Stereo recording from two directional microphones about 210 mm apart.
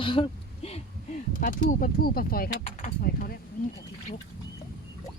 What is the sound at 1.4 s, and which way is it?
Speech, 40° left (ahead or behind).